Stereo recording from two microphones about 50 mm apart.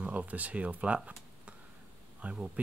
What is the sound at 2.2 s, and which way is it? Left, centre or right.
Speech, right.